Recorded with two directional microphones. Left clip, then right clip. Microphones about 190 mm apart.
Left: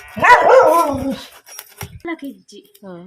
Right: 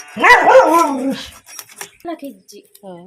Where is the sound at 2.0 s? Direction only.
Centre (ahead or behind).